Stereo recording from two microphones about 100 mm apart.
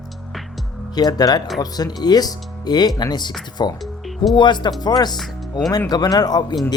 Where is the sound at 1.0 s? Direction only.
40° left (ahead or behind).